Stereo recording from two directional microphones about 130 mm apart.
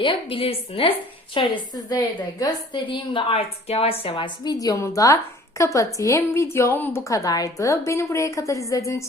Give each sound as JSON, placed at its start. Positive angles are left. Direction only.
{"t": 0.0, "sound": "a woman's voice", "side_deg": 40}
{"t": 4.5, "sound": "a woman's voice", "side_deg": 25}